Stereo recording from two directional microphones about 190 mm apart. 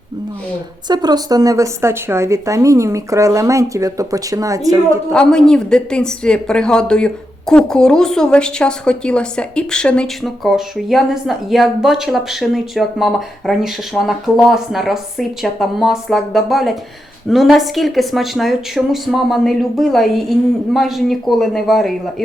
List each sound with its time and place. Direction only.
0.9 s a woman's voice: 20° right (ahead or behind)
5.1 s a woman's voice: 5° left (ahead or behind)